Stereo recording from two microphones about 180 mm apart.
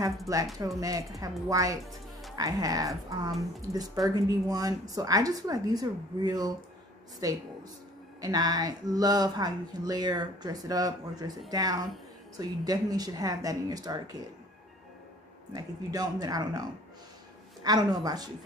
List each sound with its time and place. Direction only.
0.3 s speech: 20° right (ahead or behind)
15.5 s speech: 20° right (ahead or behind)
17.6 s speech: 25° right (ahead or behind)